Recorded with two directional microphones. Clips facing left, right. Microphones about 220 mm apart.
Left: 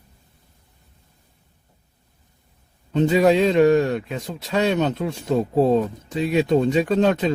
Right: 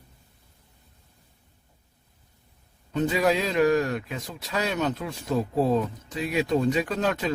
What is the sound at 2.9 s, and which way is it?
A man's voice, 25° left (ahead or behind).